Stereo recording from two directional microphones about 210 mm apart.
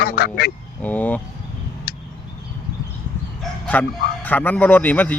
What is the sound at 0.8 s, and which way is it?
Speech, 5° left (ahead or behind).